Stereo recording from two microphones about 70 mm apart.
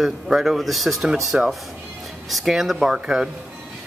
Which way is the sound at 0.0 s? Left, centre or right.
Centre.